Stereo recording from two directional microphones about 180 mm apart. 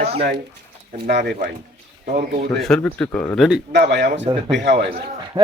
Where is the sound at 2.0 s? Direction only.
60° right (ahead or behind).